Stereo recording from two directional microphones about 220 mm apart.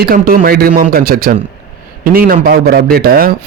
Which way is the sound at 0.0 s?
40° right (ahead or behind).